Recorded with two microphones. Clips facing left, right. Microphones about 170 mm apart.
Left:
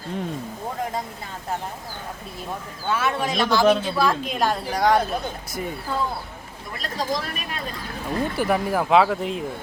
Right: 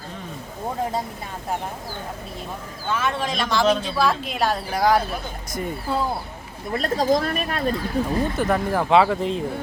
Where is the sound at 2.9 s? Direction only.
5° left (ahead or behind).